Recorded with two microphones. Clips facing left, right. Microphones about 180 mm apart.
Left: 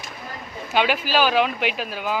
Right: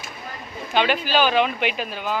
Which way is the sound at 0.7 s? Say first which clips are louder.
Even; 5° left (ahead or behind).